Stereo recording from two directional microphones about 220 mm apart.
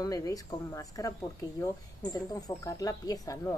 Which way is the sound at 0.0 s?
15° left (ahead or behind).